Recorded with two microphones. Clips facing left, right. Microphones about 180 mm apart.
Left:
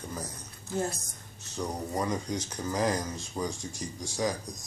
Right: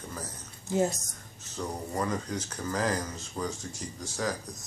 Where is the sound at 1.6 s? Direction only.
15° left (ahead or behind).